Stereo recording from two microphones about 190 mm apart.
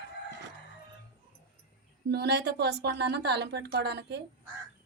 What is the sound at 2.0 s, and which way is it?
A woman's voice, 60° right (ahead or behind).